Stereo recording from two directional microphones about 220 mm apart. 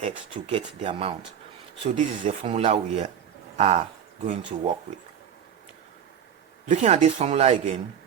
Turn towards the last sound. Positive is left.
turn(degrees=-30)  # may be behind; listen again after turning